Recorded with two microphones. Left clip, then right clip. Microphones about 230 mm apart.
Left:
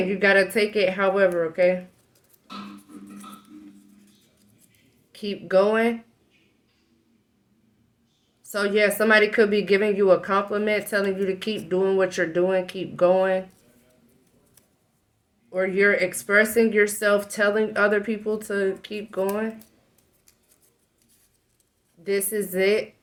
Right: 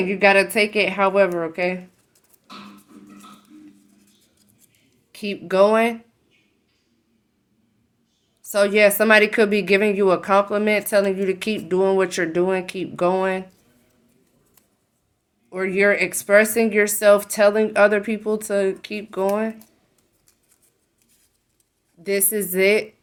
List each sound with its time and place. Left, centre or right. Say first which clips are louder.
0.1 s speech: right 4 dB; right
5.1 s speech: right 1 dB; right
8.4 s speech: right 6 dB; right
15.4 s speech: right 2 dB; right
22.0 s speech: right 2 dB; right